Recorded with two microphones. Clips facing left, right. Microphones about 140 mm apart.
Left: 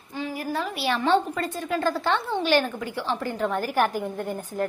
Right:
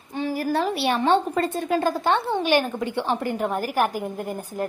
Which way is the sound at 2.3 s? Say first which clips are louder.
Right 1 dB; 15° right (ahead or behind).